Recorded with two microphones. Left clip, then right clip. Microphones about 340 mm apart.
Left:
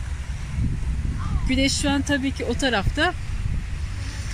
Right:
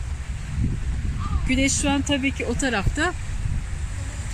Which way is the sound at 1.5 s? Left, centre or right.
Centre.